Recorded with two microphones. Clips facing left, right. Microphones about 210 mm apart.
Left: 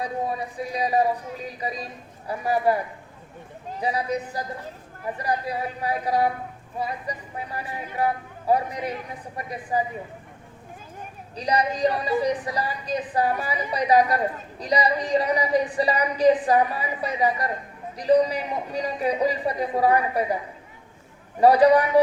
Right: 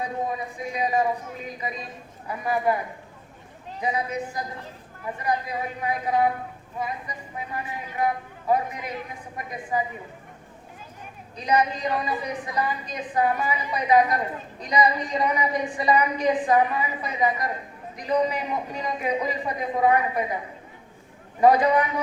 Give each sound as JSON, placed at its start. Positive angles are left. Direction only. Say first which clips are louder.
{"t": 0.3, "sound": "a woman's voice", "louder": "left 1 dB", "side_deg": 35}
{"t": 3.8, "sound": "a woman's voice", "louder": "left 1 dB", "side_deg": 35}
{"t": 11.3, "sound": "a woman's voice", "louder": "even", "side_deg": 35}
{"t": 21.4, "sound": "a woman's voice", "louder": "left 3 dB", "side_deg": 35}